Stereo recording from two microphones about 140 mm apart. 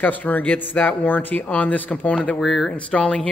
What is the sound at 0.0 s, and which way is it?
Speech, 10° left (ahead or behind).